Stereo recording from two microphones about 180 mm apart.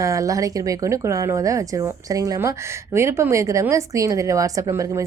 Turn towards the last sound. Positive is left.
turn(degrees=-15)  # may be behind; listen again after turning